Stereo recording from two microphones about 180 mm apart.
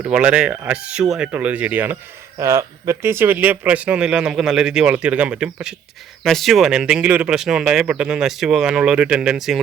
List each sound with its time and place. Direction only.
0.0 s speech: 5° right (ahead or behind)